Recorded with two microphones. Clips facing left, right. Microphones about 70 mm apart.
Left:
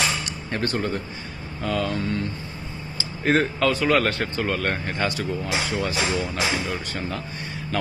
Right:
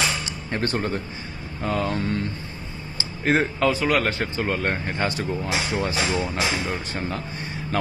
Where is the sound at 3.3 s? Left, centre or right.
Centre.